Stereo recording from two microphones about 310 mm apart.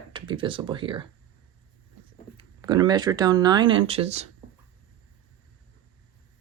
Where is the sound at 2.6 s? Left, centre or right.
Centre.